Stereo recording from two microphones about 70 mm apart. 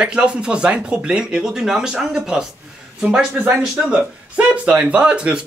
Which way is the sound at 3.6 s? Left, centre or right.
Centre.